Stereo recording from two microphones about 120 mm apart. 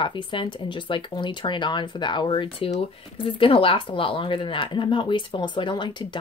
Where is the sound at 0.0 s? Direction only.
40° left (ahead or behind).